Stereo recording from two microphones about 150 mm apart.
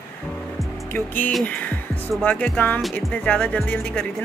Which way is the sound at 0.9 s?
10° left (ahead or behind).